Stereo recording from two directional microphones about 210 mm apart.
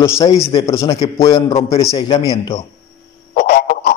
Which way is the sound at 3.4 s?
50° left (ahead or behind).